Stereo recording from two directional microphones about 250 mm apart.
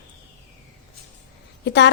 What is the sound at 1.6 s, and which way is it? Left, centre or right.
Speech, left.